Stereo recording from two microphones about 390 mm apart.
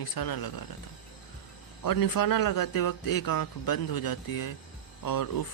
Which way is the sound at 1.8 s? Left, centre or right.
Left.